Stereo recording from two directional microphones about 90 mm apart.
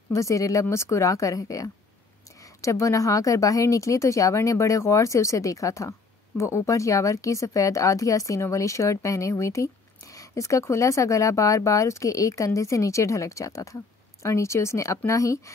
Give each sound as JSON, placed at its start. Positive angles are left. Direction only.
{"t": 0.1, "sound": "speech", "side_deg": 35}